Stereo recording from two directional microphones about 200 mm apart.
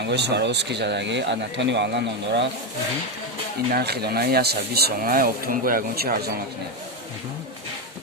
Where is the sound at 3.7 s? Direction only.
50° right (ahead or behind).